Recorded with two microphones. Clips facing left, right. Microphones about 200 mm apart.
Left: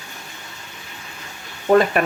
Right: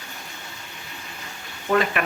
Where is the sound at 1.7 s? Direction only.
40° left (ahead or behind).